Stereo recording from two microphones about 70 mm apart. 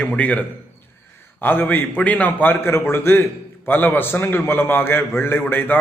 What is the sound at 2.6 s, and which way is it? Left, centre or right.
A man's voice, left.